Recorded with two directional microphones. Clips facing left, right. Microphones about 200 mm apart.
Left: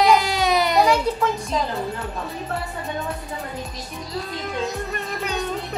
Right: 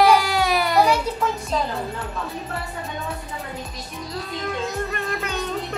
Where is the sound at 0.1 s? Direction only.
20° left (ahead or behind).